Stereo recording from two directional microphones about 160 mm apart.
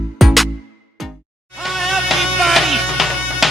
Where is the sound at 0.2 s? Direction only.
Centre (ahead or behind).